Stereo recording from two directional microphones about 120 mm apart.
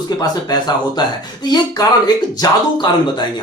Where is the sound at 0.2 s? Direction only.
35° left (ahead or behind).